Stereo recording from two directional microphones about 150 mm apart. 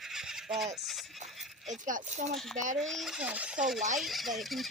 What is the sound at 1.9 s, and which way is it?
Speech, 55° right (ahead or behind).